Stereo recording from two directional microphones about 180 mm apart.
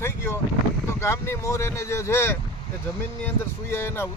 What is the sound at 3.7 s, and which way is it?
Speech, 15° left (ahead or behind).